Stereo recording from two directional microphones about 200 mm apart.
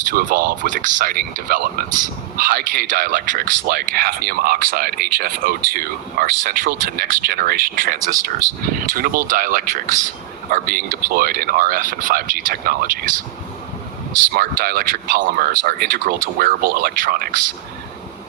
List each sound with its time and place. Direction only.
0.1 s speech: 45° right (ahead or behind)
14.3 s speech: 50° right (ahead or behind)